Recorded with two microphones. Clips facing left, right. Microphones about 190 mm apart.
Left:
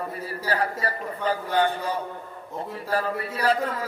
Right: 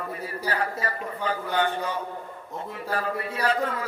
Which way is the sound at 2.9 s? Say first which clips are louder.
Left 2 dB; 35° left (ahead or behind).